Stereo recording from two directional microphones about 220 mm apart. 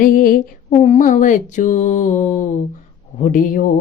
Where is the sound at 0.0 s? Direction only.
40° left (ahead or behind).